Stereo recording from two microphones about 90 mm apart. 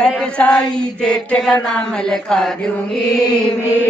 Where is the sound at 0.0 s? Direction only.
15° left (ahead or behind).